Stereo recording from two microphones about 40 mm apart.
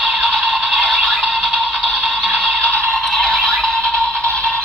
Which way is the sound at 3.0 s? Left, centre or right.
Centre.